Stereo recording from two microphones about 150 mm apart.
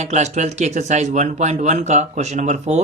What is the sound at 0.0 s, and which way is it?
Speech, 50° right (ahead or behind).